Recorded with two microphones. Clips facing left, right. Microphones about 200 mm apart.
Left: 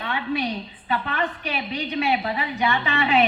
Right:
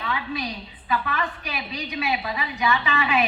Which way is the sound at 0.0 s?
30° left (ahead or behind).